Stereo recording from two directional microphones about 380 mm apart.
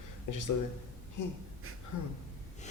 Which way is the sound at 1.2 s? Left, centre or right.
Left.